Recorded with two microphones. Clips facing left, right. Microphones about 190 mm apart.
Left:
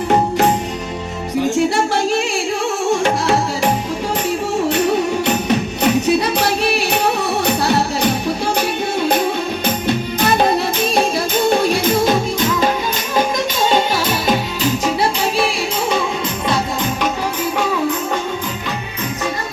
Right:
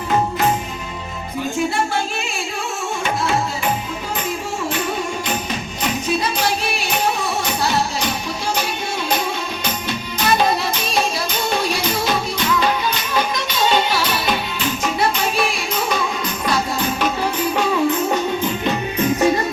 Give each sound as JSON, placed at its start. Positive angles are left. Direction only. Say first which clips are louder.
{"t": 1.5, "sound": "music", "louder": "left 1 dB", "side_deg": 75}
{"t": 4.7, "sound": "music", "louder": "left 7 dB", "side_deg": 70}
{"t": 13.7, "sound": "music", "louder": "left 1 dB", "side_deg": 45}